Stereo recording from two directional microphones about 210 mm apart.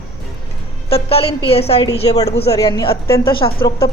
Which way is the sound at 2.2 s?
50° left (ahead or behind).